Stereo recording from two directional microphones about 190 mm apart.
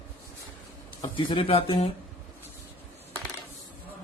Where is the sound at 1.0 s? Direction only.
25° left (ahead or behind).